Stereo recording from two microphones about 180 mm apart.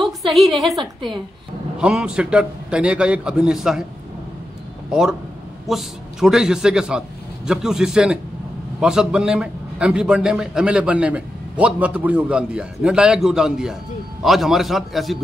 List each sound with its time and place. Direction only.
0.0 s a woman's voice: centre (ahead or behind)
4.9 s a man's voice: 5° right (ahead or behind)